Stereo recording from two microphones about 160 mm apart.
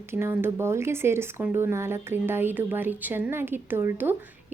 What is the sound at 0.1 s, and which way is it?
Speech, 15° right (ahead or behind).